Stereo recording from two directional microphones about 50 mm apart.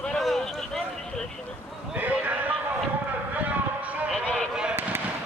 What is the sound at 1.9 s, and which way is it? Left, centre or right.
Clip-clop, right.